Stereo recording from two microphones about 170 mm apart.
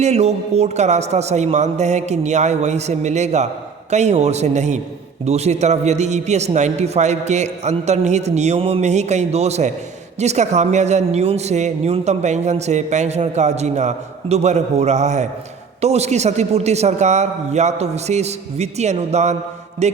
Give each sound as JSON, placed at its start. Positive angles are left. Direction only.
{"t": 0.0, "sound": "a man's voice", "side_deg": -40}
{"t": 19.8, "sound": "mantra", "side_deg": -40}